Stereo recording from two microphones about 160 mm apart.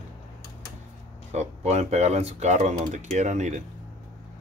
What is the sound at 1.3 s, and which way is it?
Speech, 45° right (ahead or behind).